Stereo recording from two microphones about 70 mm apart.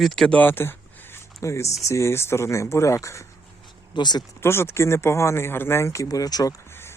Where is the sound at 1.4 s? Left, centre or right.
Left.